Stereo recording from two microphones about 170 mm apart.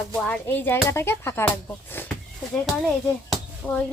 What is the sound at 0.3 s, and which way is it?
Speech, 10° left (ahead or behind).